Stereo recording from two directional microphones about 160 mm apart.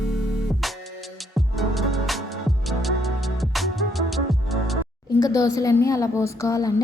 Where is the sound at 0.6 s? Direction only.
Centre (ahead or behind).